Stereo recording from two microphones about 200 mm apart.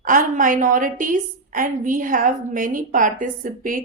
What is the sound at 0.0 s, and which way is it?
A woman's voice, 40° right (ahead or behind).